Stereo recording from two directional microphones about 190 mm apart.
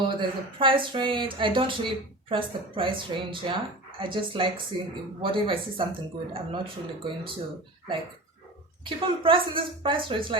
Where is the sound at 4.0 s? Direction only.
25° right (ahead or behind).